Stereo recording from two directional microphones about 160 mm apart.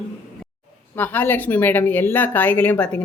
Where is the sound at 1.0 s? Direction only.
10° left (ahead or behind).